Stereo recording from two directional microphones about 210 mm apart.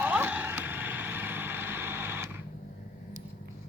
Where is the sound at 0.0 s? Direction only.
10° right (ahead or behind).